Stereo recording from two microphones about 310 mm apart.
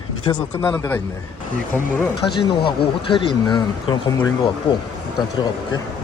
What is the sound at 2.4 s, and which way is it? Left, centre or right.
Speech, centre.